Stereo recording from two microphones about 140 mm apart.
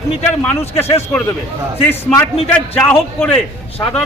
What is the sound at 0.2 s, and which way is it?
Speech, 50° left (ahead or behind).